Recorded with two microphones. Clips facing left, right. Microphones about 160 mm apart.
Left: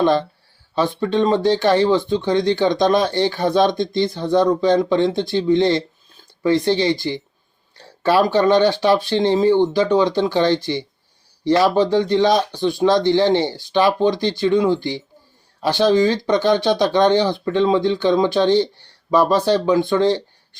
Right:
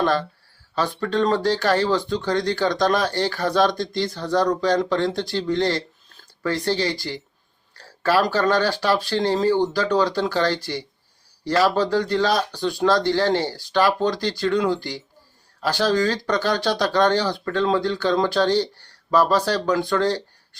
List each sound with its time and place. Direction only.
0.0 s speech: 20° left (ahead or behind)